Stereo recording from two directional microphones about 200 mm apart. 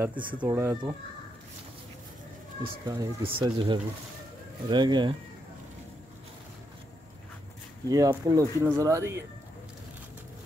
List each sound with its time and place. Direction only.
0.4 s speech: 10° right (ahead or behind)
2.6 s speech: 20° right (ahead or behind)
7.9 s speech: 15° right (ahead or behind)